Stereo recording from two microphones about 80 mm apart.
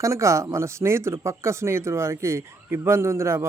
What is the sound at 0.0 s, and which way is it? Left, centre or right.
Speech, right.